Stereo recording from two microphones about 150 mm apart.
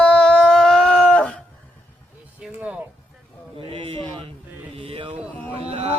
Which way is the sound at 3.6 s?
35° right (ahead or behind).